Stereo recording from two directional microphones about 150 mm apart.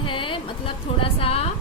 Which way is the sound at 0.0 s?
35° left (ahead or behind).